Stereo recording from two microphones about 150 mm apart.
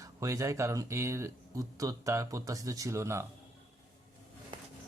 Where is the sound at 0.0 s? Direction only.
20° right (ahead or behind).